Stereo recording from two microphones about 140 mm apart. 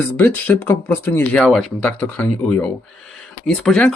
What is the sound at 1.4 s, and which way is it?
Speech, centre (ahead or behind).